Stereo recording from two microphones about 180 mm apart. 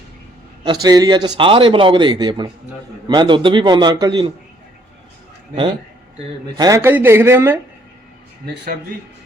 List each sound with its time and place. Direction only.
0.6 s a man's voice: 25° right (ahead or behind)
6.6 s speech: 15° right (ahead or behind)